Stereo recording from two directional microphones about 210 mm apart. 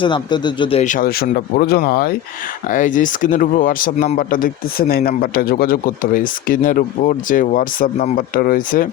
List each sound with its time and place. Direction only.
0.0 s speech: 20° left (ahead or behind); by 8.9 s 40° left (ahead or behind)